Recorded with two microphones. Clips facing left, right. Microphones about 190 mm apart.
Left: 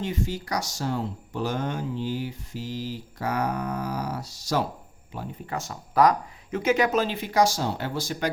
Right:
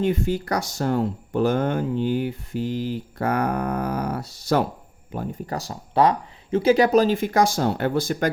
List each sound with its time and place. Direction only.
0.0 s speech: 55° right (ahead or behind)
5.5 s speech: 30° right (ahead or behind); by 8.3 s 55° right (ahead or behind)